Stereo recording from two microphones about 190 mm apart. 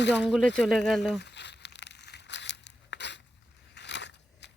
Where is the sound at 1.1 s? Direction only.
65° left (ahead or behind).